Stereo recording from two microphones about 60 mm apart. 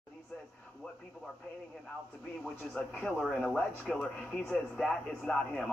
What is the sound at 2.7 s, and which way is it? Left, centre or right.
Speech, centre.